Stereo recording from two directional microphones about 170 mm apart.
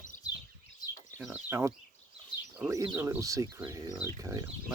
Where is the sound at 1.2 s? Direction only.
10° right (ahead or behind).